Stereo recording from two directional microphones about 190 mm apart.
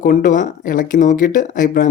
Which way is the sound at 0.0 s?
45° left (ahead or behind).